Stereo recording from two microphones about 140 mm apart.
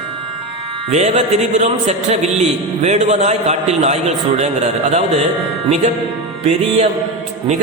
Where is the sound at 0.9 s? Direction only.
50° right (ahead or behind).